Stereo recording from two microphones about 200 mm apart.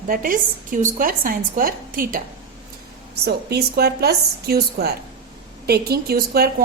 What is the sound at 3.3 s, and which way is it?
A woman's voice, 55° right (ahead or behind).